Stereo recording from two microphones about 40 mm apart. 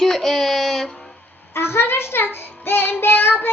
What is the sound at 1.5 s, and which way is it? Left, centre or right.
Child singing, left.